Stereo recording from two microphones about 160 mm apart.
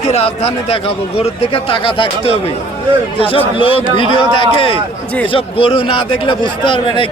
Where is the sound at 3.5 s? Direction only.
35° left (ahead or behind).